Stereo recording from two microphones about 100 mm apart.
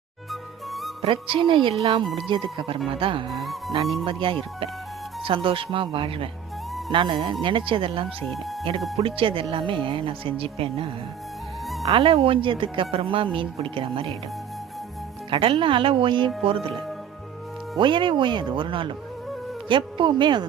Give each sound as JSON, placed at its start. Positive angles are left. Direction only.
{"t": 0.3, "sound": "music", "side_deg": 0}
{"t": 1.0, "sound": "speech", "side_deg": -60}
{"t": 3.2, "sound": "speech", "side_deg": 0}
{"t": 4.0, "sound": "speech", "side_deg": -60}
{"t": 15.3, "sound": "speech", "side_deg": -60}
{"t": 17.7, "sound": "speech", "side_deg": -55}